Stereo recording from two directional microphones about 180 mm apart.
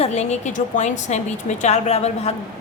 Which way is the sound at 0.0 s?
40° left (ahead or behind).